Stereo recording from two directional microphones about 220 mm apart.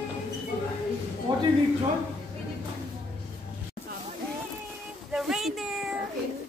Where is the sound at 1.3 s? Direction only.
20° right (ahead or behind).